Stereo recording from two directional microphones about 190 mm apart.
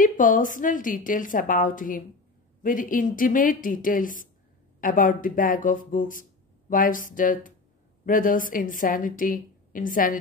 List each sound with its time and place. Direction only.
0.0 s a woman's voice: 45° left (ahead or behind)